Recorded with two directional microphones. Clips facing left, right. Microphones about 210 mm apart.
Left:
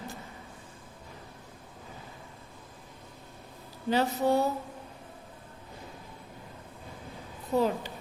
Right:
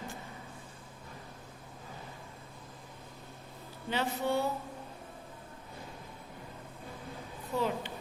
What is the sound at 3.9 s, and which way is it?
Speech, 40° left (ahead or behind).